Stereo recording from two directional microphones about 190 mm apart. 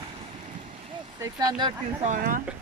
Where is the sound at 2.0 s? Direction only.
45° right (ahead or behind).